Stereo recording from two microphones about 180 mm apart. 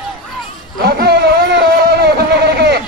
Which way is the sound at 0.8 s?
60° right (ahead or behind).